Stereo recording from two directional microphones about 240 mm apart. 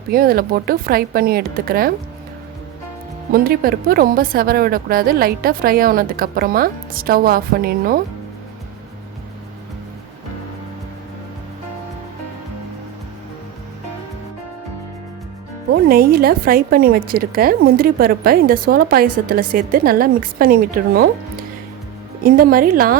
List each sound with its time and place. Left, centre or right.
0.1 s a woman's voice: right
3.3 s a woman's voice: right
15.7 s a woman's voice: right